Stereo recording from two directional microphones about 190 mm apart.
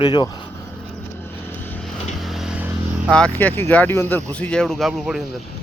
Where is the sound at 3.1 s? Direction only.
5° left (ahead or behind).